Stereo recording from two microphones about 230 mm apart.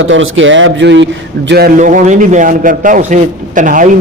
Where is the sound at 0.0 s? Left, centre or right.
Right.